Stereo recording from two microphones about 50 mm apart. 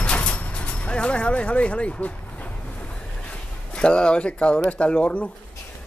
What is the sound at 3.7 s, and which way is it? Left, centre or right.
Speech, centre.